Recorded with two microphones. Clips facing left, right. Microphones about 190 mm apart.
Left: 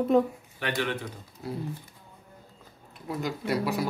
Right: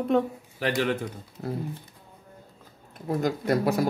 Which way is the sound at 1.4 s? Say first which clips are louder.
Right 3 dB; 50° right (ahead or behind).